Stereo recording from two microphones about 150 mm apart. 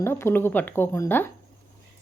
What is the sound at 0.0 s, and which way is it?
A woman's voice, 15° left (ahead or behind).